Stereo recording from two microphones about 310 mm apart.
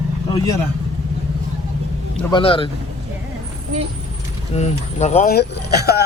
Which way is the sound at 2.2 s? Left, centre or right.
Centre.